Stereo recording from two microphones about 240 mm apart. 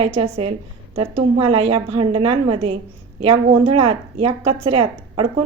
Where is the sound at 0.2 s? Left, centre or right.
Right.